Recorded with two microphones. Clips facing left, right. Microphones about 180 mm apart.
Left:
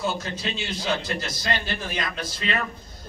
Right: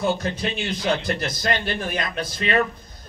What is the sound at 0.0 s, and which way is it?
Speech, 55° right (ahead or behind).